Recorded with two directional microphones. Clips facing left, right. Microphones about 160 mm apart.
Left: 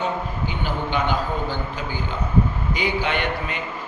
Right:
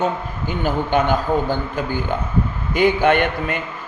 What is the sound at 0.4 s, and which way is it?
A man's voice, 45° right (ahead or behind).